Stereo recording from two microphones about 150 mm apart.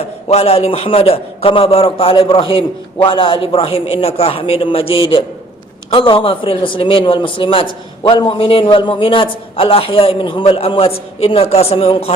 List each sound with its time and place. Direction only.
0.0 s a man's voice: 45° left (ahead or behind)